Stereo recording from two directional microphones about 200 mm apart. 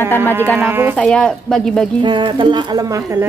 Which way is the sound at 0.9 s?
5° left (ahead or behind).